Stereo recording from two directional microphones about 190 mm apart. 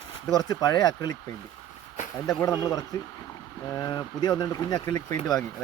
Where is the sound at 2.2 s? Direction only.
20° left (ahead or behind).